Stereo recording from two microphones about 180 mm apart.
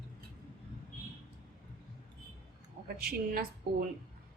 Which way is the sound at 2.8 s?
60° right (ahead or behind).